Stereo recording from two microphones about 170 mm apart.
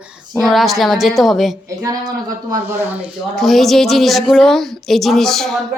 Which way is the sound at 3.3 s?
Centre (ahead or behind).